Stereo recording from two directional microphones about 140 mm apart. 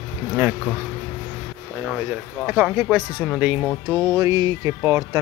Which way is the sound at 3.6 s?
5° left (ahead or behind).